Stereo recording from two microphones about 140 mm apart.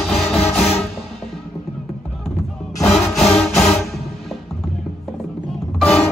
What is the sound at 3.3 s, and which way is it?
Music, 5° left (ahead or behind).